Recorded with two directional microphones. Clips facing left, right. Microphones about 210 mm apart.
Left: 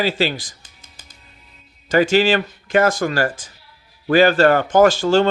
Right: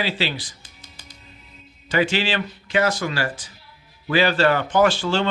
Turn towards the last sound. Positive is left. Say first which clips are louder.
# left 5 dB
turn(degrees=45)  # may be behind; listen again after turning